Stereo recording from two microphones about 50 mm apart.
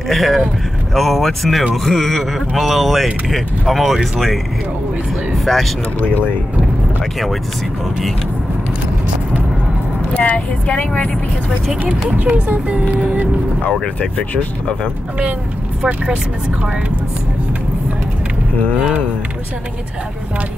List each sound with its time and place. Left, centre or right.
0.1 s speech: centre
10.1 s speech: left
12.2 s speech: right
14.1 s speech: left
18.8 s speech: centre